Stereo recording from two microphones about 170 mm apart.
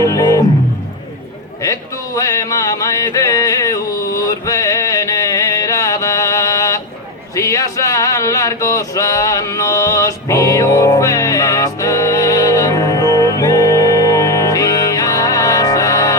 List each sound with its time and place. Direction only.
0.0 s music: 20° left (ahead or behind)
1.6 s music: 20° left (ahead or behind)
7.3 s male singing: 20° left (ahead or behind)